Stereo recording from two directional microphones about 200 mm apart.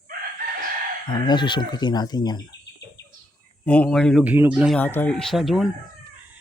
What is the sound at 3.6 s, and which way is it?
Speech, 5° left (ahead or behind).